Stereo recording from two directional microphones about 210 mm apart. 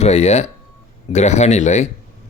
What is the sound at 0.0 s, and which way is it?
Speech, 30° left (ahead or behind).